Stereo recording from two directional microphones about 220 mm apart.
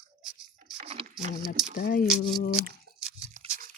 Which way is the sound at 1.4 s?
40° left (ahead or behind).